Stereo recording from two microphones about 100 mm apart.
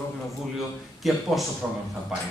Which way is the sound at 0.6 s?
Centre (ahead or behind).